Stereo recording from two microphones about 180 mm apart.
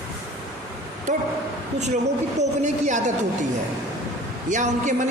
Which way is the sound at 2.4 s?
40° right (ahead or behind).